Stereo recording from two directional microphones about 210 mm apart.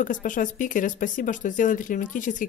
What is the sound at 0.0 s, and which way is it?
Speech, 40° left (ahead or behind).